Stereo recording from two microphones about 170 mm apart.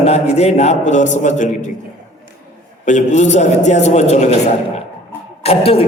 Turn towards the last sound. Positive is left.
turn(degrees=35)  # may be behind; listen again after turning